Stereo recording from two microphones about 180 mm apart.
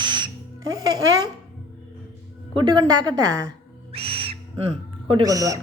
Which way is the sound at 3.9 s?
30° right (ahead or behind).